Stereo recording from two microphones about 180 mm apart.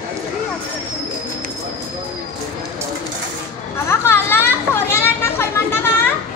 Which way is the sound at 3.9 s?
15° left (ahead or behind).